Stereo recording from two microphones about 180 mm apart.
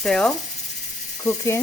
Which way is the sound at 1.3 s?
15° left (ahead or behind).